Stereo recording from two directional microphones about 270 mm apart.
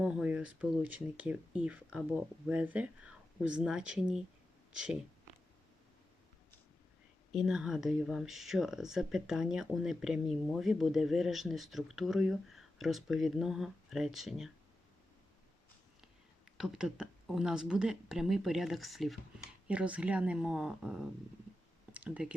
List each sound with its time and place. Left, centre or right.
0.0 s speech: centre
7.3 s speech: centre
16.6 s speech: centre